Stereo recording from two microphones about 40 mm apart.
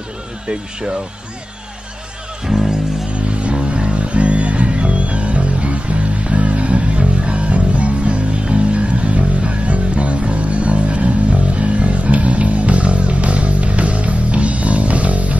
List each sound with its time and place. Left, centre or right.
0.5 s speech: right
2.4 s music: centre
3.1 s music: right